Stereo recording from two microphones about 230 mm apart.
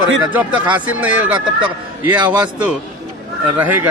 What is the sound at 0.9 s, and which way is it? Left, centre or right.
Speech, centre.